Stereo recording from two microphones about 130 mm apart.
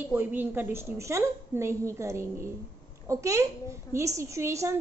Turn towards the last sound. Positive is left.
turn(degrees=-20)  # may be behind; listen again after turning